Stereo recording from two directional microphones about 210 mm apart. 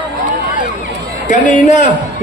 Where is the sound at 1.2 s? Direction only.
35° left (ahead or behind).